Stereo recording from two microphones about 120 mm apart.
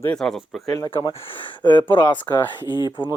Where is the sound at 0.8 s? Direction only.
45° left (ahead or behind).